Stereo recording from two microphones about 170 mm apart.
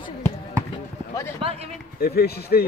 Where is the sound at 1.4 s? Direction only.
40° right (ahead or behind).